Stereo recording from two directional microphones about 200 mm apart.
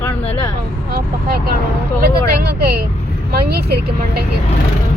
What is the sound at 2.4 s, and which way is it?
Vehicle, 50° right (ahead or behind).